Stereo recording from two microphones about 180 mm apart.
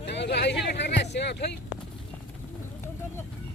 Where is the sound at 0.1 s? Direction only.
70° left (ahead or behind).